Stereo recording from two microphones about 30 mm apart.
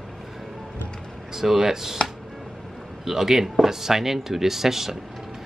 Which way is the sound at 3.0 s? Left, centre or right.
Centre.